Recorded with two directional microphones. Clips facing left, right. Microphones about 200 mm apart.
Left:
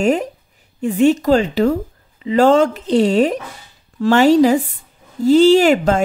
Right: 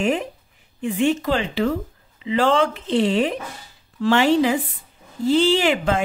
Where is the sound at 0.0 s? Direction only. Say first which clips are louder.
Left 5 dB; 40° left (ahead or behind).